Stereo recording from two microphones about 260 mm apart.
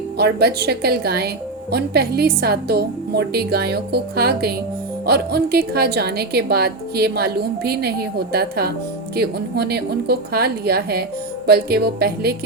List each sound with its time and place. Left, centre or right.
0.2 s a woman's voice: right